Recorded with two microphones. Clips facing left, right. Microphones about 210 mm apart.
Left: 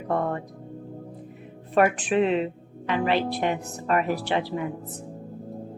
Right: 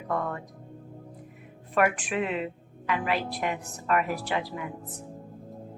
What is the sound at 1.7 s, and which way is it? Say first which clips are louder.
Speech: left 5 dB; 30° left (ahead or behind).